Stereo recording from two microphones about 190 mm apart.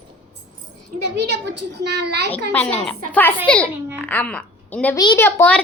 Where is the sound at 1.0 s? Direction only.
65° right (ahead or behind).